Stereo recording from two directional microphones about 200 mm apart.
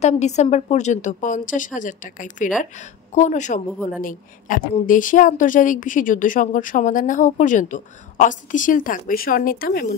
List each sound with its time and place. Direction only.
0.0 s a woman's voice: 35° left (ahead or behind)